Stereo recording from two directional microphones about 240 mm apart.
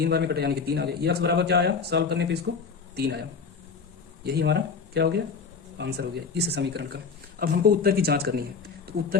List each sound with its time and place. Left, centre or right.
0.0 s a man's voice: right